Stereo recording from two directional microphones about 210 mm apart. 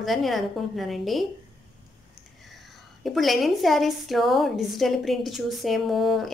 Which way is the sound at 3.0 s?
Centre (ahead or behind).